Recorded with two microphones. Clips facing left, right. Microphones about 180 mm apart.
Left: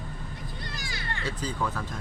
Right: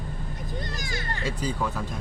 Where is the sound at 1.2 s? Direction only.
10° right (ahead or behind).